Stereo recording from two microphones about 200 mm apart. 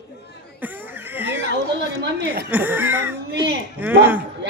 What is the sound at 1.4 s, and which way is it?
Chatter, 60° right (ahead or behind).